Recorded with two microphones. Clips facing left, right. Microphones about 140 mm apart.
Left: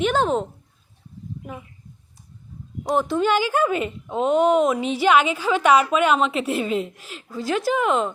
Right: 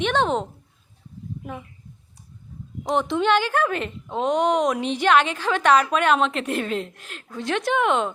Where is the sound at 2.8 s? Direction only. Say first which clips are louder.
Left 1 dB; 5° left (ahead or behind).